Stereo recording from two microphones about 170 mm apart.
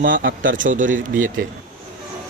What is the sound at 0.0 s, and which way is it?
Speech, 60° right (ahead or behind).